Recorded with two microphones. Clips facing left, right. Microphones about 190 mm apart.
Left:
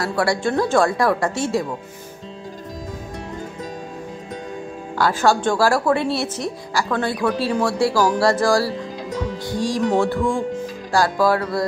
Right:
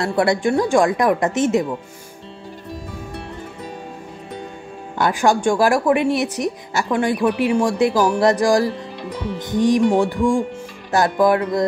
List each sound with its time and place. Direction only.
0.0 s a woman's voice: 20° right (ahead or behind)
4.9 s a woman's voice: 20° right (ahead or behind)